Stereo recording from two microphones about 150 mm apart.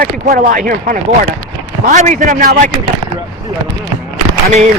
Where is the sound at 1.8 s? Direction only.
55° right (ahead or behind).